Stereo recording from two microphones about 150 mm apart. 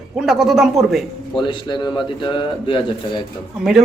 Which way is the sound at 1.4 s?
30° left (ahead or behind).